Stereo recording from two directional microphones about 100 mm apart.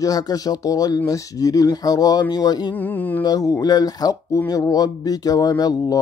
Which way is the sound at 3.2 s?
40° left (ahead or behind).